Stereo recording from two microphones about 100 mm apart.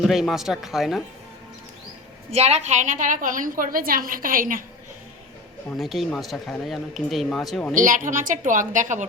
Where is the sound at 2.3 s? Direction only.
90° right.